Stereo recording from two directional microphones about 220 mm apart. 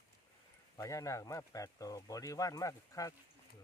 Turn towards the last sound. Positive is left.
turn(degrees=15)  # may be behind; listen again after turning